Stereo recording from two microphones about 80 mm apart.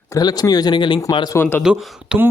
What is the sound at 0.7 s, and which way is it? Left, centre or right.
Speech, left.